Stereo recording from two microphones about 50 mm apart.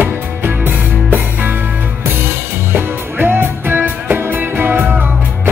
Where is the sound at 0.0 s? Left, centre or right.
Right.